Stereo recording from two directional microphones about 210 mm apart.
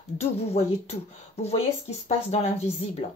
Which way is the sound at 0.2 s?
30° left (ahead or behind).